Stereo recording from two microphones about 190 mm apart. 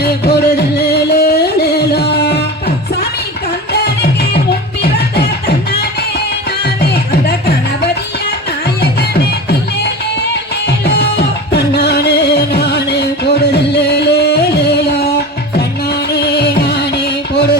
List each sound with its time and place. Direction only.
0.0 s music: 60° left (ahead or behind)
6.9 s music: 55° left (ahead or behind)
10.7 s music: 60° left (ahead or behind)
15.5 s music: 55° left (ahead or behind)